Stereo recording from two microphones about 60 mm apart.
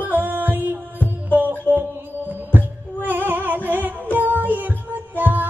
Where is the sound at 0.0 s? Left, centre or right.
Right.